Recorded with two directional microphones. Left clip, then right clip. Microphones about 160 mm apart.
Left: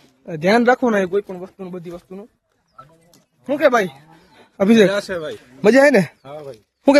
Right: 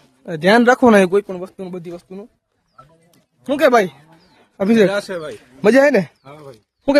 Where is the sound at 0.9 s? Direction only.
75° right (ahead or behind).